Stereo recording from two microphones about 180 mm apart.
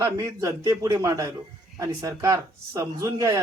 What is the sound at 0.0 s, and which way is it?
A man's voice, 15° right (ahead or behind).